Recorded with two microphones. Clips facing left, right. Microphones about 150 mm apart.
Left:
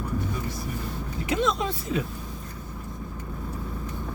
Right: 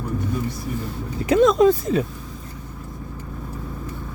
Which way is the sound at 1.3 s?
45° right (ahead or behind).